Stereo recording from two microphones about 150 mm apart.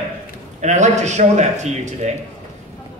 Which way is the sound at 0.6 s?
50° right (ahead or behind).